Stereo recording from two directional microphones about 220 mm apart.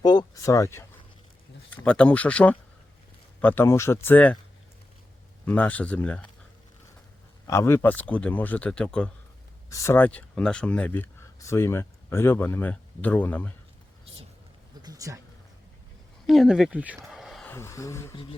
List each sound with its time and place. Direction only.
0.0 s a sound: 20° left (ahead or behind)
1.7 s speech: 5° left (ahead or behind)
5.5 s speech: 5° left (ahead or behind)
7.4 s speech: 10° left (ahead or behind)
9.6 s speech: 15° left (ahead or behind)
14.8 s speech: 15° right (ahead or behind)
16.2 s speech: centre (ahead or behind)
18.1 s a sound: 25° left (ahead or behind)